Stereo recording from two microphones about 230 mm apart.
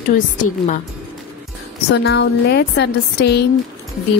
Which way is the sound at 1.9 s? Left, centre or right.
Left.